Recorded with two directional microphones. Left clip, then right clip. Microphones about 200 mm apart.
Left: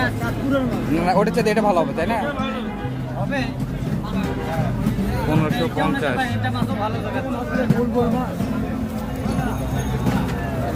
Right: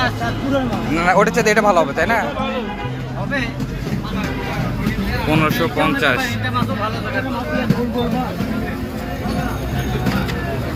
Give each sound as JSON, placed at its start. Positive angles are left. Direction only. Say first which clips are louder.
{"t": 1.0, "sound": "speech", "louder": "right 5 dB", "side_deg": 15}
{"t": 5.3, "sound": "speech", "louder": "right 6 dB", "side_deg": 0}